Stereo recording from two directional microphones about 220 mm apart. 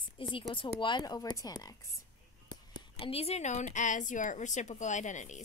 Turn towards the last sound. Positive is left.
turn(degrees=35)  # may be behind; listen again after turning